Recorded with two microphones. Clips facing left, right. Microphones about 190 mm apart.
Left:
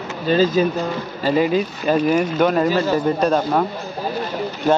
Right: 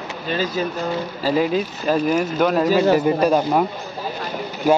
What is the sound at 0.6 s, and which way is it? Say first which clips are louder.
Speech: left 5 dB; 15° left (ahead or behind).